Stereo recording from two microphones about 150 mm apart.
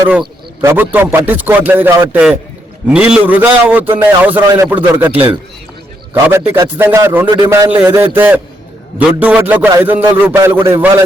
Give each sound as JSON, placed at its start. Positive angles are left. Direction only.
{"t": 0.6, "sound": "a man's voice", "side_deg": -15}
{"t": 6.5, "sound": "a man's voice", "side_deg": -15}
{"t": 7.3, "sound": "a man's voice", "side_deg": -25}
{"t": 7.7, "sound": "a man's voice", "side_deg": -10}